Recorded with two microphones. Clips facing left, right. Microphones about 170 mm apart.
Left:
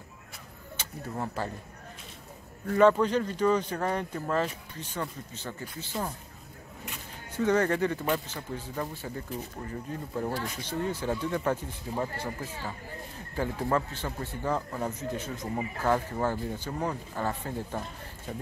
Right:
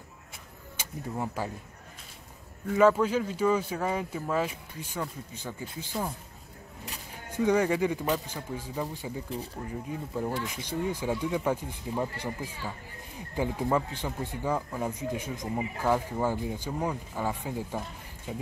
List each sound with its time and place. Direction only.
0.7 s speech: 10° right (ahead or behind)
2.7 s a man's voice: 5° right (ahead or behind)
7.3 s a man's voice: 10° right (ahead or behind)